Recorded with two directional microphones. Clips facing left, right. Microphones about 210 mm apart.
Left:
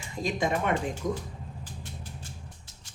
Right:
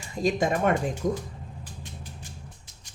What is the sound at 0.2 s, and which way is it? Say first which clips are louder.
Speech: right 4 dB; 45° right (ahead or behind).